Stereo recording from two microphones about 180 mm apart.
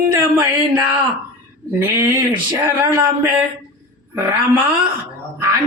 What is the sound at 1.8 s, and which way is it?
Speech, 10° right (ahead or behind).